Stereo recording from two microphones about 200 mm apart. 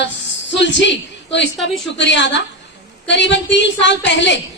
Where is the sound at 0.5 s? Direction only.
65° left (ahead or behind).